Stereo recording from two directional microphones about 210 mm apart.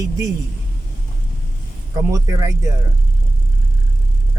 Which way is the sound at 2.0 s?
15° right (ahead or behind).